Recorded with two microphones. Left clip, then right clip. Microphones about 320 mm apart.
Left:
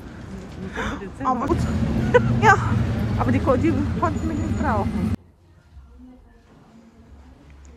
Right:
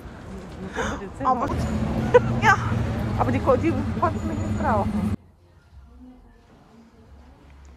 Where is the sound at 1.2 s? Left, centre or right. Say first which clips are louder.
Right 1 dB; right.